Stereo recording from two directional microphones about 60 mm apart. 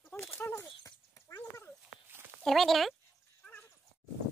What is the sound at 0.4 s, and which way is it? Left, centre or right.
Dog, left.